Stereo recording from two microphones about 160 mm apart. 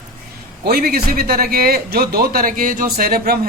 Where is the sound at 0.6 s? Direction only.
70° right (ahead or behind).